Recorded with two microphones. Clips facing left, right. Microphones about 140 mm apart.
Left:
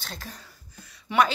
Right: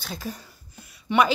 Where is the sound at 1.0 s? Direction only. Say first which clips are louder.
Right 2 dB; 5° right (ahead or behind).